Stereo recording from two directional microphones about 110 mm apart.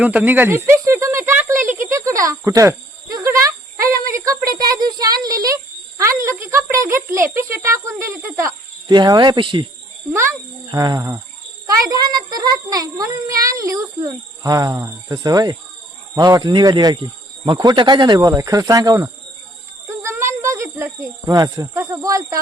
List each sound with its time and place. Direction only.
0.0 s snake: 15° right (ahead or behind)
2.0 s insect: 30° right (ahead or behind)
6.0 s speech: 25° right (ahead or behind)
8.9 s speech: 40° right (ahead or behind)
10.1 s a child's voice: 25° right (ahead or behind); by 18.2 s 40° right (ahead or behind)
18.2 s speech: 30° right (ahead or behind)